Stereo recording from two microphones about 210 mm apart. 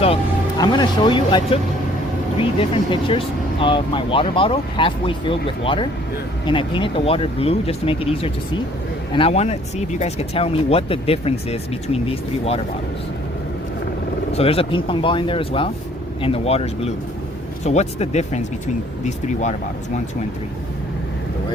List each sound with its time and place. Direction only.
0.6 s speech: 20° left (ahead or behind)
14.3 s speech: 25° left (ahead or behind)